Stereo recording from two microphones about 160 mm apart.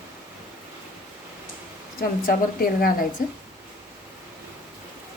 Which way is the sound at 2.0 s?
60° left (ahead or behind).